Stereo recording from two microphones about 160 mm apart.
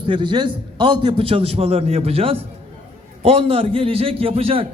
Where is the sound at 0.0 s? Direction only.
30° right (ahead or behind).